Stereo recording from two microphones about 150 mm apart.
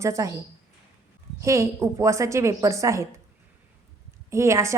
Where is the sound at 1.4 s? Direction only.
20° right (ahead or behind).